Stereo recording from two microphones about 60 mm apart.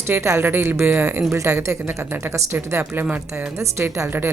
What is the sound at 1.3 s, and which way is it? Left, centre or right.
A woman's voice, right.